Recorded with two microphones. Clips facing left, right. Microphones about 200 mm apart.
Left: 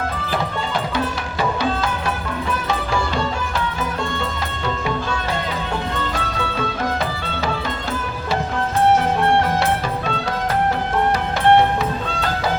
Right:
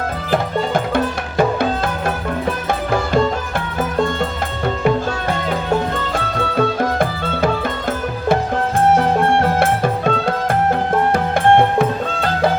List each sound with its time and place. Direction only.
0.3 s music: 50° right (ahead or behind)
3.9 s music: 50° right (ahead or behind)
6.1 s music: 55° right (ahead or behind)
9.4 s music: 50° right (ahead or behind)